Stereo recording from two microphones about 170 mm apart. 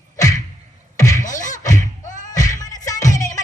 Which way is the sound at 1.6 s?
20° left (ahead or behind).